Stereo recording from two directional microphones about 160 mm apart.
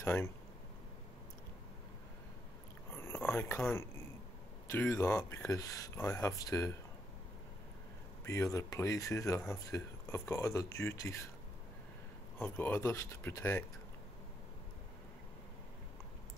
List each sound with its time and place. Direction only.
0.0 s speech: 15° left (ahead or behind)
2.9 s a sound: 15° left (ahead or behind)
4.6 s speech: 15° left (ahead or behind)
8.3 s speech: 20° left (ahead or behind)
12.4 s speech: 10° left (ahead or behind)